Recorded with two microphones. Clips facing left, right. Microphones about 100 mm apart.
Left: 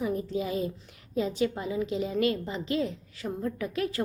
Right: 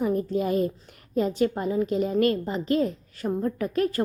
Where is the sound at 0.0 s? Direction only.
50° right (ahead or behind).